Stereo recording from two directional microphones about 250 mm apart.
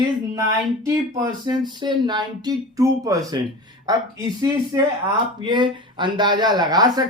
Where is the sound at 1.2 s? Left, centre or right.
Centre.